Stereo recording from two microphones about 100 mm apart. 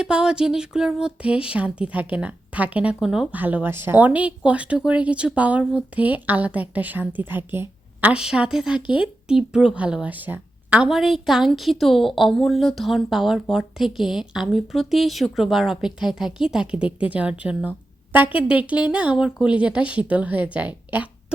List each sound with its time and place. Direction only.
0.0 s speech: 10° right (ahead or behind)
3.3 s speech: 15° right (ahead or behind)
8.1 s speech: 10° right (ahead or behind)
10.8 s a woman's voice: 5° right (ahead or behind)